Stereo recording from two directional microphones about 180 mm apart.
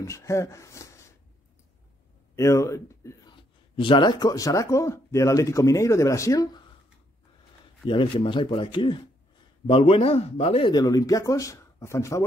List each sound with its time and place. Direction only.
0.0 s speech: 15° left (ahead or behind)
2.3 s speech: 15° left (ahead or behind)
3.7 s speech: 30° left (ahead or behind)
7.8 s speech: 25° left (ahead or behind)